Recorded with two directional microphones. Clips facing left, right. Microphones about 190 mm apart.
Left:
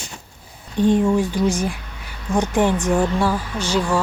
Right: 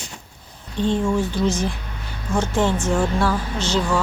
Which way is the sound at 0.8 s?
15° left (ahead or behind).